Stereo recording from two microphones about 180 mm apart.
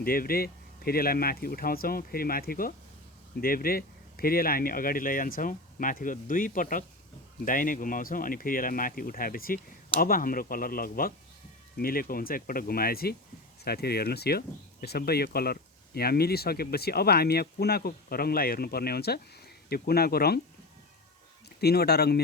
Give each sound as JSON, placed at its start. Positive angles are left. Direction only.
{"t": 0.0, "sound": "speech", "side_deg": 55}
{"t": 21.6, "sound": "speech", "side_deg": 65}